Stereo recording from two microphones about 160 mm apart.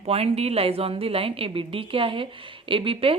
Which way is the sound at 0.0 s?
40° right (ahead or behind).